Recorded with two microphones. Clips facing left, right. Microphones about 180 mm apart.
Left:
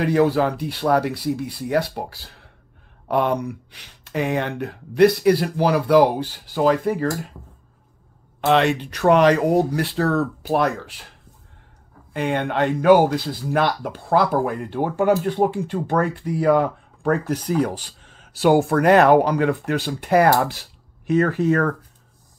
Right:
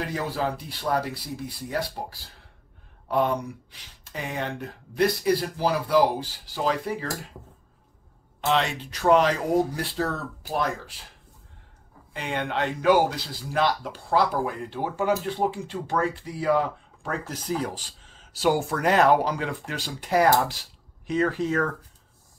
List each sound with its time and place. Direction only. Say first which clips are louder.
0.0 s speech: left 10 dB; 70° left (ahead or behind); by 7.1 s 50° left (ahead or behind)
8.4 s speech: left 7 dB; 60° left (ahead or behind)
12.1 s speech: left 7 dB; 55° left (ahead or behind)